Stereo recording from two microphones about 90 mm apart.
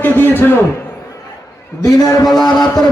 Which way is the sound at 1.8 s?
45° left (ahead or behind).